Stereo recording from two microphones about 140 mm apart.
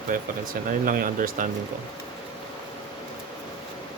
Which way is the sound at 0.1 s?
85° right.